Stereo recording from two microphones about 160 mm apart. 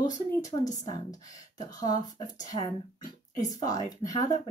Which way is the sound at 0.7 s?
20° left (ahead or behind).